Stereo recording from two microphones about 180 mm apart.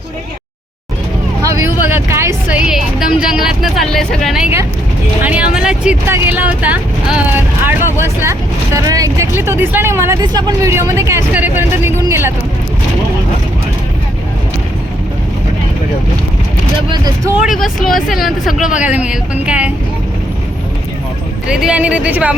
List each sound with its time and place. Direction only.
1.4 s speech: 15° right (ahead or behind)
16.9 s speech: 20° right (ahead or behind)
17.4 s speech: centre (ahead or behind)
21.4 s speech: 5° right (ahead or behind)